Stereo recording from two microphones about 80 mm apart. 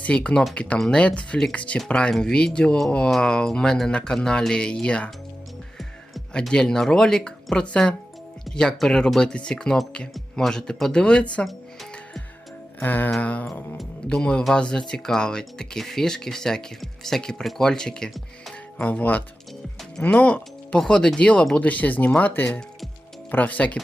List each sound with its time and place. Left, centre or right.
0.0 s speech: centre
6.3 s speech: centre
11.4 s music: centre
12.8 s speech: left; by 18.5 s centre
18.8 s speech: centre